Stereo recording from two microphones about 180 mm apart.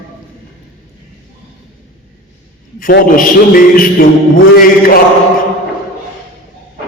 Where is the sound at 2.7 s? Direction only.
50° left (ahead or behind).